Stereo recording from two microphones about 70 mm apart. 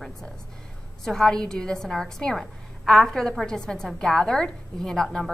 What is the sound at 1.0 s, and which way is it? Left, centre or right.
A woman's voice, centre.